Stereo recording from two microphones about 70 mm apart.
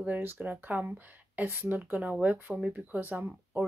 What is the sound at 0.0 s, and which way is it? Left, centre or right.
Speech, right.